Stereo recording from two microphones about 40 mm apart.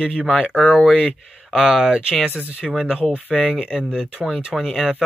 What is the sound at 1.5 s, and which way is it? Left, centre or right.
Speech, centre.